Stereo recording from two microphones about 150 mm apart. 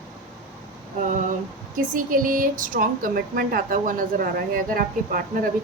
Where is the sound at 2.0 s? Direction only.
65° right (ahead or behind).